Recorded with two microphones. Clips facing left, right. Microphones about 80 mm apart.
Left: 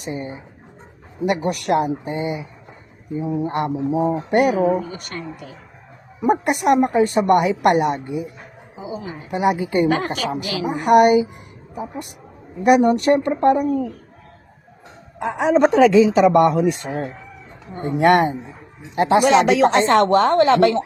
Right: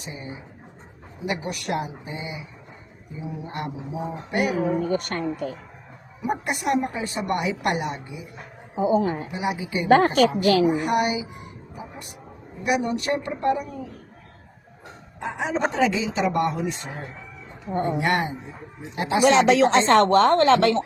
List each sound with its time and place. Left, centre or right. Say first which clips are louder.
0.0 s speech: left 10 dB; left
1.3 s a woman's voice: left 8 dB; left
4.8 s speech: right 5 dB; right
6.2 s a woman's voice: left 8 dB; left
8.7 s speech: right 10 dB; right
9.3 s a woman's voice: left 8 dB; left
10.4 s speech: right 7 dB; right
10.7 s a woman's voice: left 9 dB; left
12.6 s a woman's voice: left 10 dB; left
15.2 s a woman's voice: left 9 dB; left
19.3 s speech: left 2 dB; centre